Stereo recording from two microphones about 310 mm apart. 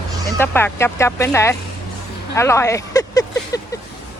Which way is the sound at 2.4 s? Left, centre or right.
Centre.